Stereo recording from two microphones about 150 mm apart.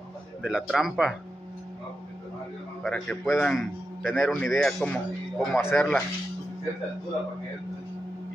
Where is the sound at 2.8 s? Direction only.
Centre (ahead or behind).